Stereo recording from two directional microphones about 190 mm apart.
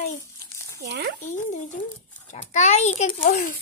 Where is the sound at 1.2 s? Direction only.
40° left (ahead or behind).